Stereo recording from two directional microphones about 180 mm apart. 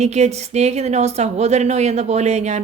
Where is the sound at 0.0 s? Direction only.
40° right (ahead or behind).